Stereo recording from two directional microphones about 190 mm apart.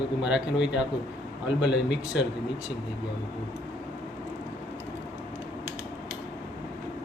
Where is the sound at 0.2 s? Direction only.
5° right (ahead or behind).